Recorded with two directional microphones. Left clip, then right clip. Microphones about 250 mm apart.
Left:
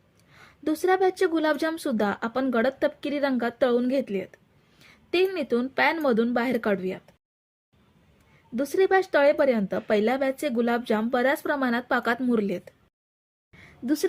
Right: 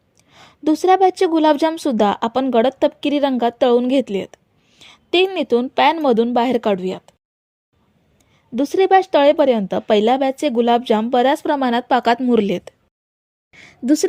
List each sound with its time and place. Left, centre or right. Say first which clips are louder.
0.3 s speech: right 10 dB; right
8.5 s speech: right 8 dB; right
13.5 s a sound: right 10 dB; right